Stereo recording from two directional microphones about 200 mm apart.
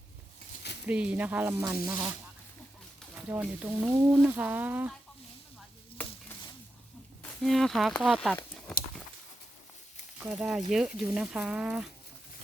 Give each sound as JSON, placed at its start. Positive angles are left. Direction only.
{"t": 0.9, "sound": "speech", "side_deg": -5}
{"t": 3.2, "sound": "speech", "side_deg": -5}
{"t": 6.0, "sound": "a sound", "side_deg": 5}
{"t": 7.2, "sound": "speech", "side_deg": 0}
{"t": 10.2, "sound": "speech", "side_deg": -5}